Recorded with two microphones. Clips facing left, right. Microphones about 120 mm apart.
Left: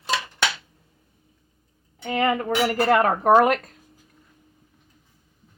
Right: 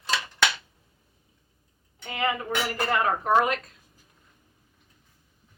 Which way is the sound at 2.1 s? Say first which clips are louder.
Left 6 dB; 55° left (ahead or behind).